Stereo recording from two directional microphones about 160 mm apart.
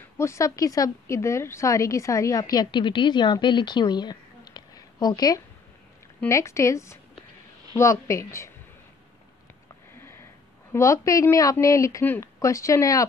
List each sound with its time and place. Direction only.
0.2 s a woman's voice: 20° left (ahead or behind)
9.9 s sniff: 15° left (ahead or behind)
10.7 s a woman's voice: 20° left (ahead or behind)